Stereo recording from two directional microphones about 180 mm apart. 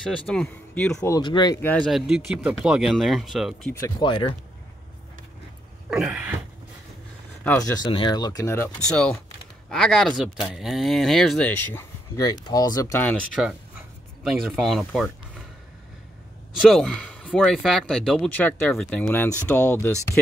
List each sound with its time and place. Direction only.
0.3 s speech: 5° left (ahead or behind)
0.9 s speech: 20° left (ahead or behind)
1.7 s speech: centre (ahead or behind)
3.8 s speech: 25° left (ahead or behind)
5.9 s a sound: 5° right (ahead or behind)
7.8 s speech: 25° left (ahead or behind)
8.9 s speech: 5° left (ahead or behind)
14.2 s speech: centre (ahead or behind)
16.6 s speech: 5° left (ahead or behind)